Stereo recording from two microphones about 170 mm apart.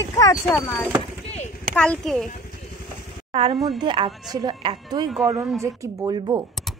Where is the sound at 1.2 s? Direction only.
40° left (ahead or behind).